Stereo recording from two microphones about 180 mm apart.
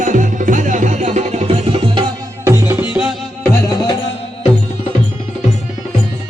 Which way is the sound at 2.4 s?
15° right (ahead or behind).